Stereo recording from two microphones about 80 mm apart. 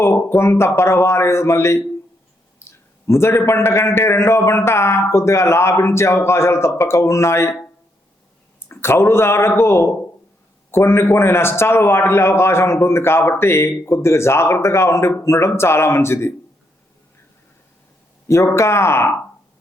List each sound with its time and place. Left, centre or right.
0.0 s a man's voice: left
8.7 s a man's voice: left
18.3 s a man's voice: left